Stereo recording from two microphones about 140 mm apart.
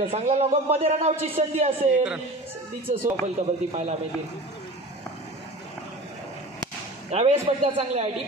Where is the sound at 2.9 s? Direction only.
60° right (ahead or behind).